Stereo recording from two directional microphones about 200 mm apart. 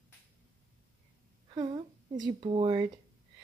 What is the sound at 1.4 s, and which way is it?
A woman's voice, 20° right (ahead or behind).